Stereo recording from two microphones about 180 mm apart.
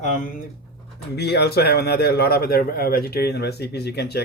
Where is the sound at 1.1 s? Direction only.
65° left (ahead or behind).